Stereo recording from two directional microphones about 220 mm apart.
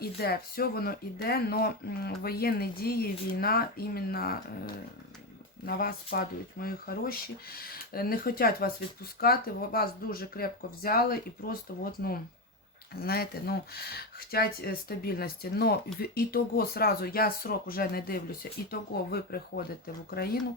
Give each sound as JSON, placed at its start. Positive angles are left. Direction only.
{"t": 0.0, "sound": "speech", "side_deg": 45}